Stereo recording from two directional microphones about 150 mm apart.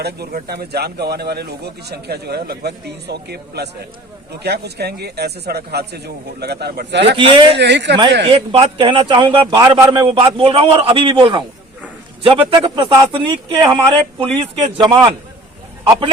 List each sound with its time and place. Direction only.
0.0 s speech: 90° right
7.0 s a man's voice: 35° right (ahead or behind)
9.6 s a man's voice: 20° right (ahead or behind)